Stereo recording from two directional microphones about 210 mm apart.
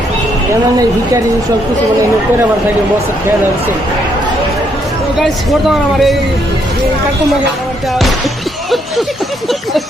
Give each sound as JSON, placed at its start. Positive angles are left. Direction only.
{"t": 5.1, "sound": "speech", "side_deg": 0}